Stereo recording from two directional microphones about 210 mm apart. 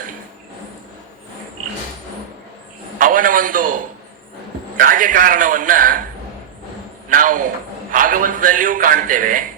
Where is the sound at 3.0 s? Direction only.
40° right (ahead or behind).